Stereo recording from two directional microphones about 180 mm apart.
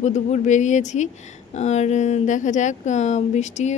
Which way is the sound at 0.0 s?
40° left (ahead or behind).